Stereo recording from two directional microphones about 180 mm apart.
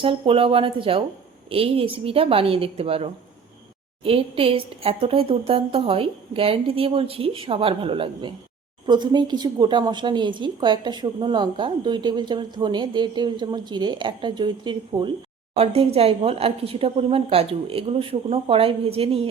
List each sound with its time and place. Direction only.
0.0 s a woman's voice: 30° right (ahead or behind)